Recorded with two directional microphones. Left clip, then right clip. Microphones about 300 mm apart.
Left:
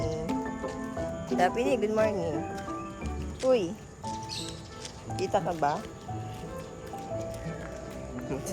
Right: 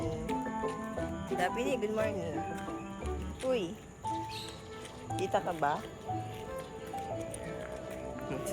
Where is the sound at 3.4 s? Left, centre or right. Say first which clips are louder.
Left 8 dB; centre.